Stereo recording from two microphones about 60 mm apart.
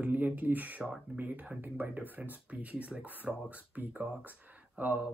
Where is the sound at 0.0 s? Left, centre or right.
Right.